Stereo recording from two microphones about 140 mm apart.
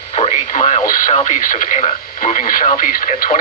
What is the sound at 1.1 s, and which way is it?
Speech, 65° left (ahead or behind).